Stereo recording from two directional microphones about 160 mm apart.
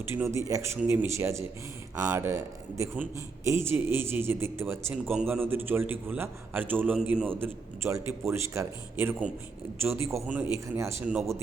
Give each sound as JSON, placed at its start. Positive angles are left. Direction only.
{"t": 0.0, "sound": "a man's voice", "side_deg": -15}
{"t": 10.2, "sound": "a man's voice", "side_deg": -5}
{"t": 10.8, "sound": "a man's voice", "side_deg": -15}